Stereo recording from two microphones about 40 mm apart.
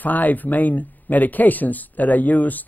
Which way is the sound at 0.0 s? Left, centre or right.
Left.